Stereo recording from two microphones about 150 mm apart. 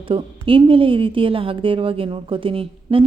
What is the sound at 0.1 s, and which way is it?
A woman's voice, 35° right (ahead or behind).